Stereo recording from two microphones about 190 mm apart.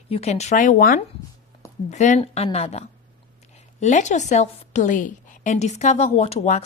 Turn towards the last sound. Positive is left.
turn(degrees=35)  # may be behind; listen again after turning